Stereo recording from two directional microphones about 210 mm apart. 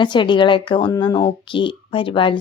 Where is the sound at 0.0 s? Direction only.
20° left (ahead or behind).